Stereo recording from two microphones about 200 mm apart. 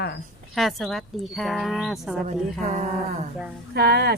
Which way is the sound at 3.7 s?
55° right (ahead or behind).